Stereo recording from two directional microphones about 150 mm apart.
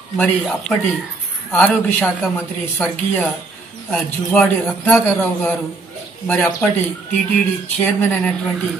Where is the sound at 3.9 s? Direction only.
5° left (ahead or behind).